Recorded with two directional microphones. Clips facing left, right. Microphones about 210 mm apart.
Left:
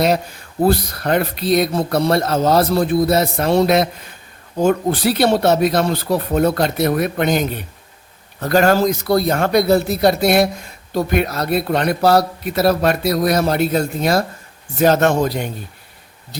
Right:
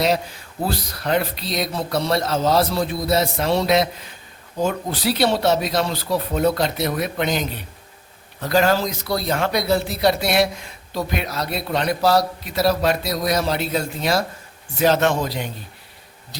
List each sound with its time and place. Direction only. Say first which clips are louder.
0.6 s a man's voice: left 9 dB; 55° left (ahead or behind)